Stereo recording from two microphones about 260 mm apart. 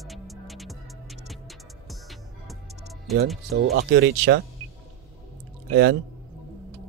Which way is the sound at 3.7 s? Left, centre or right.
Right.